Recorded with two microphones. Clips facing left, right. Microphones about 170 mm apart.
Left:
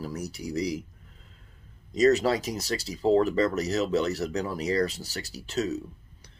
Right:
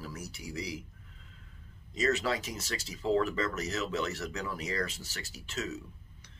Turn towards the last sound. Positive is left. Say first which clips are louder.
# left 9 dB
turn(degrees=35)  # may be behind; listen again after turning